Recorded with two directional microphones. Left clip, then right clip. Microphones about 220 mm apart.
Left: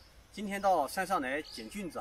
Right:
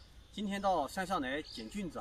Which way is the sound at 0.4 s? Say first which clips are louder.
Left 4 dB; centre (ahead or behind).